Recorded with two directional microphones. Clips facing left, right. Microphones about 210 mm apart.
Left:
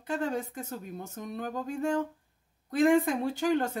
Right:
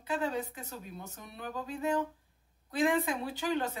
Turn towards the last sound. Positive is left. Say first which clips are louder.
# left 5 dB
turn(degrees=50)  # may be behind; listen again after turning